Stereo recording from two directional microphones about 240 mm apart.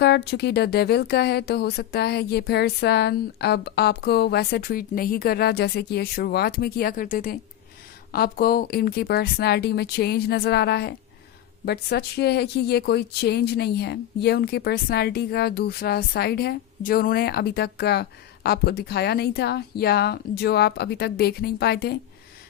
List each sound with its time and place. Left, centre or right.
0.0 s speech: left